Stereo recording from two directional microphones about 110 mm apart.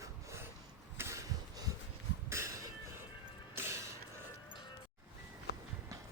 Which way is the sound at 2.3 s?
25° right (ahead or behind).